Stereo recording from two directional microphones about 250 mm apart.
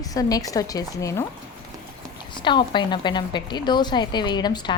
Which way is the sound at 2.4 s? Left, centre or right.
Centre.